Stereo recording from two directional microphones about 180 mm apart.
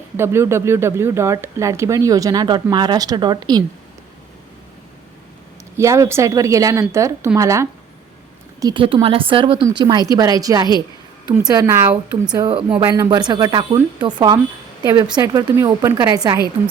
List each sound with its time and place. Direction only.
0.2 s speech: 15° right (ahead or behind)
5.7 s speech: 15° right (ahead or behind)
8.6 s speech: 30° right (ahead or behind)
12.3 s a woman's voice: 25° right (ahead or behind)